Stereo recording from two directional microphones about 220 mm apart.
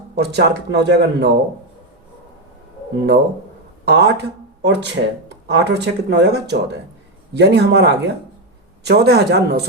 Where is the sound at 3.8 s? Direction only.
50° right (ahead or behind).